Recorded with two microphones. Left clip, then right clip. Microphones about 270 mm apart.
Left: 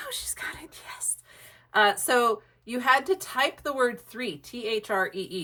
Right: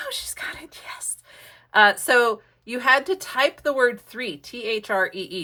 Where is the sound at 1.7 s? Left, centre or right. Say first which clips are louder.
Right 6 dB; right.